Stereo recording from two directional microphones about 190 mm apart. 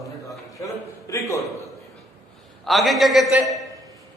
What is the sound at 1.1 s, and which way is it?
Speech, 15° left (ahead or behind).